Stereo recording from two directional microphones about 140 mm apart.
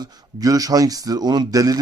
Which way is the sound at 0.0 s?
30° right (ahead or behind).